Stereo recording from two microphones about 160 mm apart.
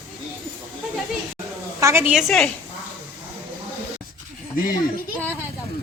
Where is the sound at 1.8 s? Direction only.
15° right (ahead or behind); by 2.4 s centre (ahead or behind).